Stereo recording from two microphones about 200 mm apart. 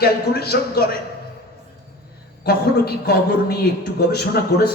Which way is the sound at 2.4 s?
55° left (ahead or behind).